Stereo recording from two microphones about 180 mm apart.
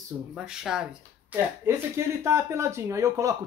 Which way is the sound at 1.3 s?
15° right (ahead or behind).